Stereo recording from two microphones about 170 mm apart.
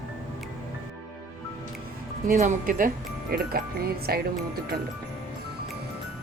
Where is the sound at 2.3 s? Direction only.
45° right (ahead or behind); by 4.2 s 65° right (ahead or behind).